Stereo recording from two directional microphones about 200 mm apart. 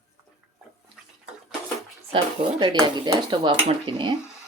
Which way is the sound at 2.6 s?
20° right (ahead or behind).